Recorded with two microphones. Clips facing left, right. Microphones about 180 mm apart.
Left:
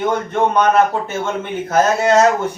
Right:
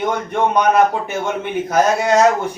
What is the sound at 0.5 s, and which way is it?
A man's voice, 15° right (ahead or behind).